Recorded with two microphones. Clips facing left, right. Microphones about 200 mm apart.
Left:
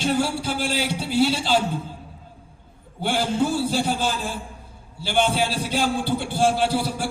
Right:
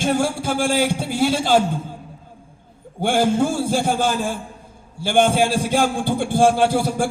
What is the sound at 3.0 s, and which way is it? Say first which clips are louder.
A man's voice: right 5 dB; 50° right (ahead or behind).